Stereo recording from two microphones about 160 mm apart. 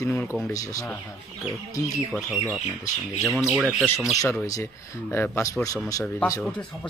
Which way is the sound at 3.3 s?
5° right (ahead or behind).